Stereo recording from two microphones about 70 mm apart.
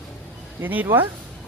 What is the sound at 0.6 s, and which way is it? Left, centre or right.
Speech, right.